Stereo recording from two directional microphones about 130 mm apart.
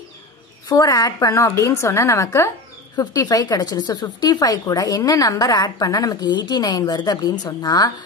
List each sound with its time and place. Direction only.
0.7 s speech: 25° left (ahead or behind)